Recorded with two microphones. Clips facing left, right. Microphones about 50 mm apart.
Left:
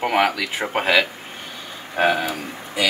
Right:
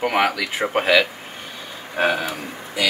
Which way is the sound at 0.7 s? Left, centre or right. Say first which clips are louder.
Right 1 dB; centre.